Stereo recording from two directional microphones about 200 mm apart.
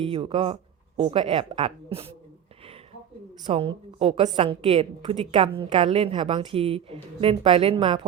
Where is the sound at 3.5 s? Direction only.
30° right (ahead or behind).